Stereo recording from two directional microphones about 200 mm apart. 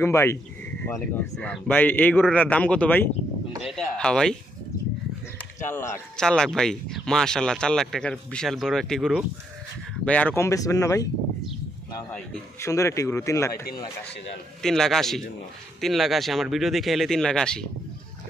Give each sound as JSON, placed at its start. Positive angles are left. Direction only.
{"t": 0.0, "sound": "a man's voice", "side_deg": 15}
{"t": 5.7, "sound": "a man's voice", "side_deg": 10}
{"t": 12.1, "sound": "a man's voice", "side_deg": 15}
{"t": 14.6, "sound": "speech", "side_deg": 0}